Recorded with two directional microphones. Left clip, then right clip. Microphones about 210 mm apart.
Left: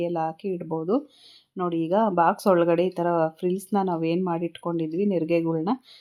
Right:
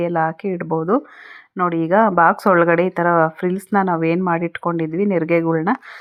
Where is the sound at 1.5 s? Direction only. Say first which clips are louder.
Right 8 dB; 15° right (ahead or behind).